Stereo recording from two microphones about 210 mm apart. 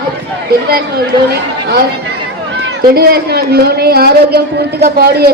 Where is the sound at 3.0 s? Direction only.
50° right (ahead or behind).